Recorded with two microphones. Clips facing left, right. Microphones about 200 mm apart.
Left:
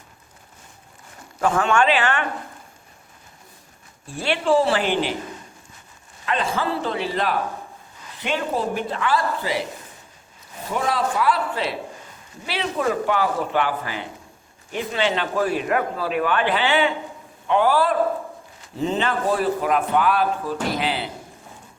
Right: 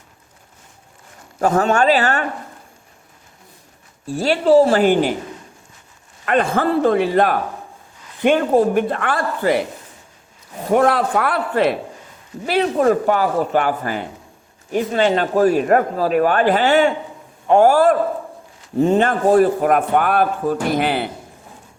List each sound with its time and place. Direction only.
1.4 s speech: 40° right (ahead or behind)
4.0 s a man's voice: 40° right (ahead or behind)
6.2 s a man's voice: 55° right (ahead or behind)
10.7 s a man's voice: 60° right (ahead or behind)